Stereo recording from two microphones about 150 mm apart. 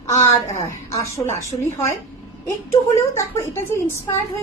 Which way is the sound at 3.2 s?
15° left (ahead or behind).